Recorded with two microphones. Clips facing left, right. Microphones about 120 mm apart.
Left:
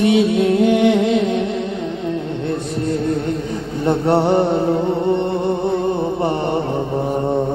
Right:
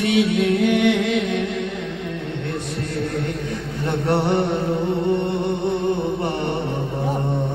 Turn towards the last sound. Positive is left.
turn(degrees=25)  # may be behind; listen again after turning